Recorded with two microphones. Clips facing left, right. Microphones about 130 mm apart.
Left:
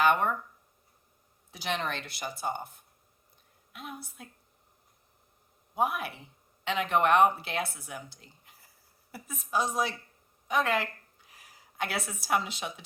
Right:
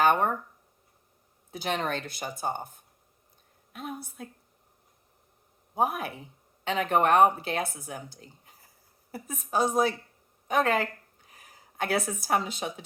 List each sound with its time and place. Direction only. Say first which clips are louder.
0.0 s a woman's voice: right 2 dB; 40° right (ahead or behind)
1.5 s a woman's voice: right 3 dB; 45° right (ahead or behind)
5.7 s a woman's voice: right 2 dB; 40° right (ahead or behind)